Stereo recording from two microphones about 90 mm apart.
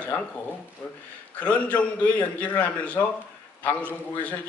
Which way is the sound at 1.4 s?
15° left (ahead or behind).